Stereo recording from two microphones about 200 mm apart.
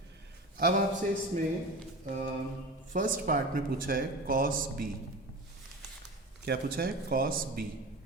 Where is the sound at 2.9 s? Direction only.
45° right (ahead or behind).